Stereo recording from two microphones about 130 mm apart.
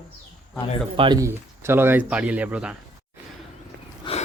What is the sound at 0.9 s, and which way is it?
Speech, 40° right (ahead or behind).